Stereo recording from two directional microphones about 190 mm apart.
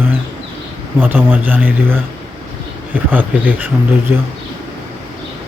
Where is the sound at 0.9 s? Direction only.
10° right (ahead or behind).